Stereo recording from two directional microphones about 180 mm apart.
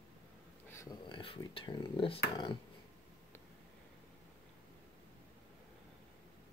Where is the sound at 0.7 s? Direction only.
15° left (ahead or behind).